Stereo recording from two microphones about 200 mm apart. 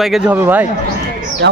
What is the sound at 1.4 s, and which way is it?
Speech, 55° right (ahead or behind).